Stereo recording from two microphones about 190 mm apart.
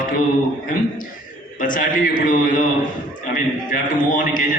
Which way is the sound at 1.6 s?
45° left (ahead or behind).